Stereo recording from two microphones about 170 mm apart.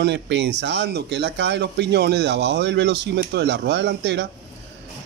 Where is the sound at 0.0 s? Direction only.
90° right.